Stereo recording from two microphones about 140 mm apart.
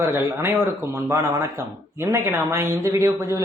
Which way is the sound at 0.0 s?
15° right (ahead or behind).